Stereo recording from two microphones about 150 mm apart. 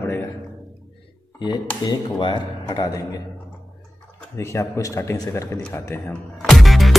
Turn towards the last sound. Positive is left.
turn(degrees=0)  # may be behind; listen again after turning